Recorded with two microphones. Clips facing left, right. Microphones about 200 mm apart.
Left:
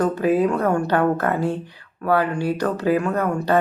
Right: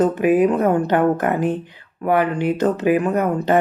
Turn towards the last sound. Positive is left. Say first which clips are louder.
# right 3 dB
turn(degrees=-20)  # may be behind; listen again after turning